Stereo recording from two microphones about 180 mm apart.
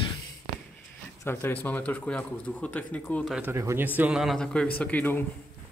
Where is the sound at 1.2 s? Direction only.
10° left (ahead or behind).